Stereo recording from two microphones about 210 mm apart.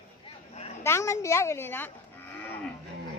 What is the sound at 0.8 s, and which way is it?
Speech, 15° left (ahead or behind).